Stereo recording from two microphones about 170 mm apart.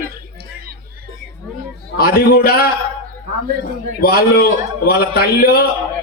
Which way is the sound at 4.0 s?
65° left (ahead or behind).